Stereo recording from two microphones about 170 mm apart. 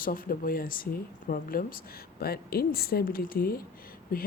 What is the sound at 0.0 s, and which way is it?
Speech, 55° left (ahead or behind).